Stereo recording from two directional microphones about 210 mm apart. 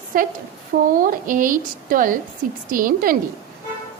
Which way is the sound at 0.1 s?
40° right (ahead or behind).